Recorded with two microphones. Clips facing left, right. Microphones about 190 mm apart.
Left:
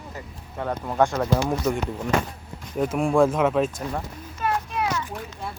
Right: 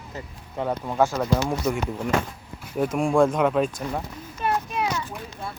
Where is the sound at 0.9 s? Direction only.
Centre (ahead or behind).